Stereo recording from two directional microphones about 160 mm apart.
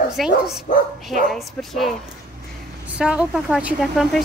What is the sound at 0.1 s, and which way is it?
Speech, centre (ahead or behind).